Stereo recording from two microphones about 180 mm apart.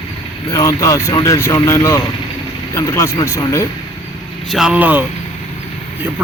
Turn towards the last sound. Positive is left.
turn(degrees=-10)  # may be behind; listen again after turning